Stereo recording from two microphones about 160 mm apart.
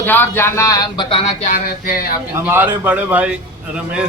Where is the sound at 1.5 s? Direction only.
60° left (ahead or behind).